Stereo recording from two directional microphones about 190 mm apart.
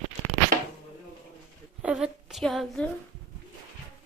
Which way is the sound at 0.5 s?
50° right (ahead or behind).